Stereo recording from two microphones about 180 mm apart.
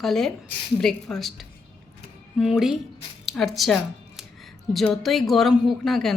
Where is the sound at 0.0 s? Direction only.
Centre (ahead or behind).